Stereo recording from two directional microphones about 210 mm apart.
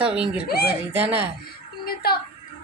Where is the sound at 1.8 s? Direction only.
45° left (ahead or behind).